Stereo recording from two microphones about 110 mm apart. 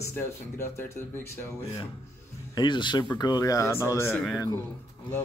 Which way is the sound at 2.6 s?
45° left (ahead or behind).